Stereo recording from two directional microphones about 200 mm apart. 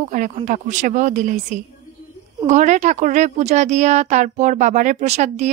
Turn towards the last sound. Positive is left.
turn(degrees=-35)  # may be behind; listen again after turning